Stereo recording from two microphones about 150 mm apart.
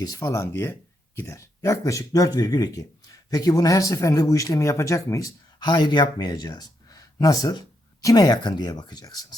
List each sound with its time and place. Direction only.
0.0 s speech: 20° left (ahead or behind)